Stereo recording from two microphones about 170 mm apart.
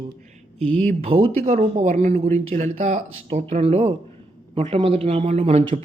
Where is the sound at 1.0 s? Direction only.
35° right (ahead or behind).